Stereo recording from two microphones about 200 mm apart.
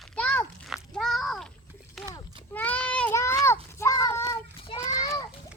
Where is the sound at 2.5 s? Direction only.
5° left (ahead or behind).